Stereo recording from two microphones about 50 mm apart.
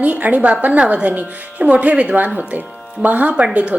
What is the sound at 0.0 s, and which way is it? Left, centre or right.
A woman's voice, right.